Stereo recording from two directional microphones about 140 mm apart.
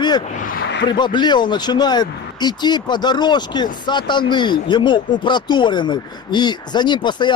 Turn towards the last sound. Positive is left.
turn(degrees=30)  # may be behind; listen again after turning